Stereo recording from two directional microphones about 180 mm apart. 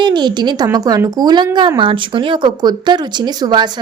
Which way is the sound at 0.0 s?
25° right (ahead or behind).